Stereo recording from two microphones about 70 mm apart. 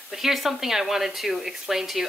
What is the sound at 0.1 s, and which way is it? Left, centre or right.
Speech, centre.